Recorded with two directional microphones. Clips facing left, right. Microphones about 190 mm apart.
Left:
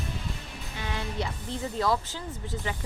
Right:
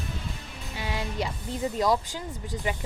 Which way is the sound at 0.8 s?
10° right (ahead or behind).